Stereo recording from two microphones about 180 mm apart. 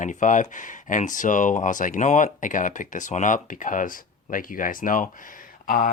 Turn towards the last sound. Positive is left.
turn(degrees=50)  # may be behind; listen again after turning